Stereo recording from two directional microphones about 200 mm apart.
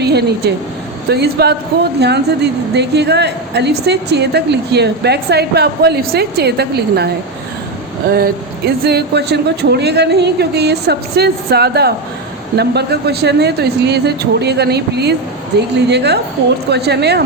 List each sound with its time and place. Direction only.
0.0 s a woman's voice: 55° right (ahead or behind)
8.1 s a woman's voice: 50° right (ahead or behind)